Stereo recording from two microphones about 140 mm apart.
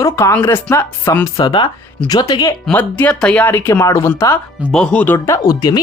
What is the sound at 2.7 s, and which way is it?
Speech, 15° left (ahead or behind).